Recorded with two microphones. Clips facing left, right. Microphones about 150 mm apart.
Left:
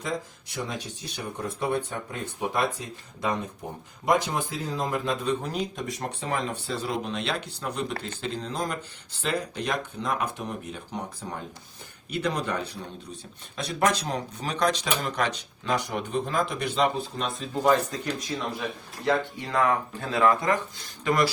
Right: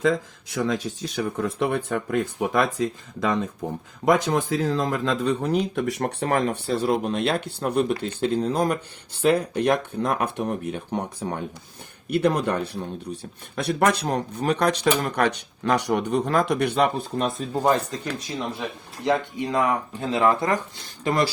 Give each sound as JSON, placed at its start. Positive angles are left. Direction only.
{"t": 0.9, "sound": "speech", "side_deg": -90}
{"t": 12.1, "sound": "speech", "side_deg": -55}
{"t": 19.0, "sound": "speech", "side_deg": -15}